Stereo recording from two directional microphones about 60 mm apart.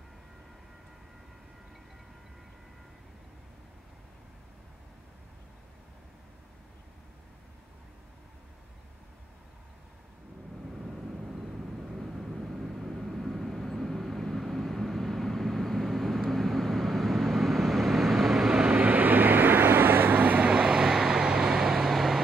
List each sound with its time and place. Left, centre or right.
10.8 s vehicle: centre
18.8 s vehicle: right
20.4 s vehicle: centre